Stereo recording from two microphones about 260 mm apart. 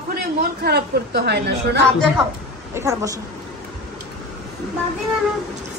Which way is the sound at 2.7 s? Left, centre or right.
Centre.